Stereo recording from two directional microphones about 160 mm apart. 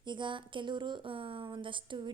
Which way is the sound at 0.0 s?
30° right (ahead or behind).